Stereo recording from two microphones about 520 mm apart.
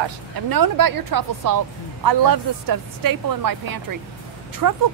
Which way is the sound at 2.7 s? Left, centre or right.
Right.